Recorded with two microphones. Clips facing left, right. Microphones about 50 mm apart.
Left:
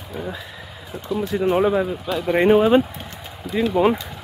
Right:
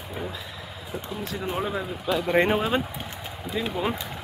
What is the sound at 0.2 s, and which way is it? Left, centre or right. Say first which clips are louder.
Speech: left 4 dB; centre.